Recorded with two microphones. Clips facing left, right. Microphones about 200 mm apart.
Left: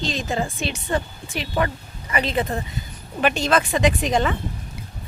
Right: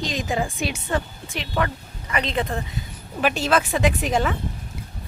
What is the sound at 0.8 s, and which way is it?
Speech, centre (ahead or behind).